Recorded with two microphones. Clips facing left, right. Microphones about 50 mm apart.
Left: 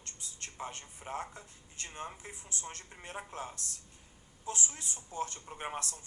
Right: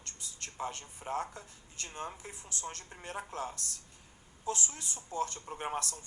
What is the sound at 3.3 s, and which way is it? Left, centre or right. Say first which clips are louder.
Speech: right 3 dB; left.